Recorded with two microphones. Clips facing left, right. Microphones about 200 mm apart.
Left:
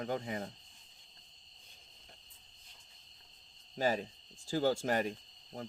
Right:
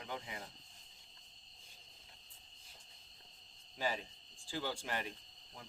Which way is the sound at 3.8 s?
40° left (ahead or behind).